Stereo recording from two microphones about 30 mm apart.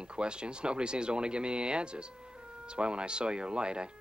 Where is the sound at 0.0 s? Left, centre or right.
Right.